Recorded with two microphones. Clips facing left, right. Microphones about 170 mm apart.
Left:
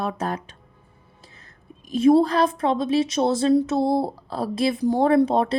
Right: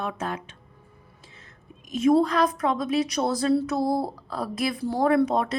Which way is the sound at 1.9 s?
30° left (ahead or behind).